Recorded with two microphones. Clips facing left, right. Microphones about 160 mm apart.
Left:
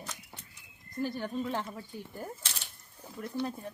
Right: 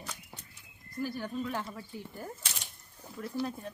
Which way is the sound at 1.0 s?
25° left (ahead or behind).